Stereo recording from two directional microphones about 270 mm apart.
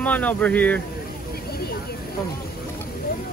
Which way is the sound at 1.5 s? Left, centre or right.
Left.